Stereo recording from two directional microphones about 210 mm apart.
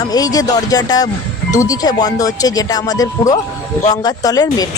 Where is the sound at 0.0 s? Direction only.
20° left (ahead or behind).